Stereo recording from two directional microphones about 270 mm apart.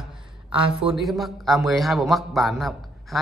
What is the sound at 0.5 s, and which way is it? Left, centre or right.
Speech, centre.